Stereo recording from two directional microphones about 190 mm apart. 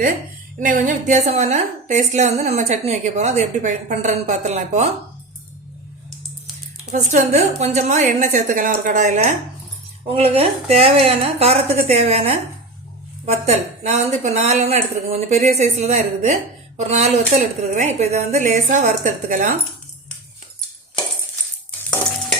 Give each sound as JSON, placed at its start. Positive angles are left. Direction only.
{"t": 0.6, "sound": "a woman's voice", "side_deg": -45}
{"t": 6.9, "sound": "a woman's voice", "side_deg": -35}